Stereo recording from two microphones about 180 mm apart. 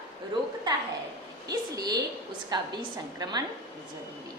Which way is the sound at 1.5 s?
20° right (ahead or behind).